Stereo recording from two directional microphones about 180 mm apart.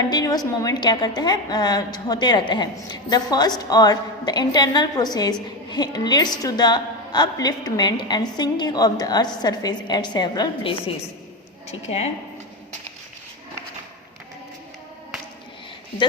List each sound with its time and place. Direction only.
0.0 s a woman's voice: 20° left (ahead or behind); by 12.1 s 35° left (ahead or behind)